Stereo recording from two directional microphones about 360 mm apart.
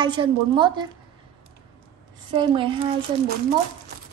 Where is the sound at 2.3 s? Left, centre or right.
Centre.